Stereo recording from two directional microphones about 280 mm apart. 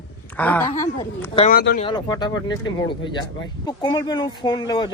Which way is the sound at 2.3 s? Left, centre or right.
Left.